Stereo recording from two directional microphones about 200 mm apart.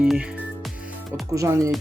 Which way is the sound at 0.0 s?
5° right (ahead or behind).